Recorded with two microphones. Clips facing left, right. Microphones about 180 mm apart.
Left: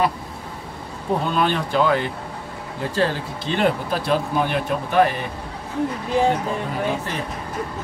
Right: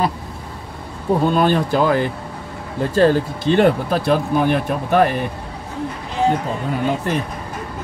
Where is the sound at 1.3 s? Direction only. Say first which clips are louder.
Right 4 dB; 40° right (ahead or behind).